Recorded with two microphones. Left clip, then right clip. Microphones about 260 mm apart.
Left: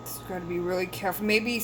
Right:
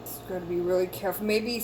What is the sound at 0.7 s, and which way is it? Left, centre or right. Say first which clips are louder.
Speech: right 2 dB; left.